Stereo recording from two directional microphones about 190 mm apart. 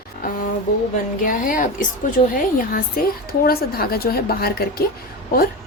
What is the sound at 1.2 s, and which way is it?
A woman's voice, 45° left (ahead or behind).